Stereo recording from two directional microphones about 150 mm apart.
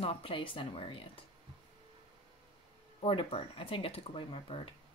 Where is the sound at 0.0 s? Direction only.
40° left (ahead or behind).